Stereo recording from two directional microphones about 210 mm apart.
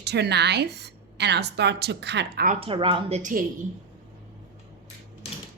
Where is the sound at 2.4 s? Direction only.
30° right (ahead or behind).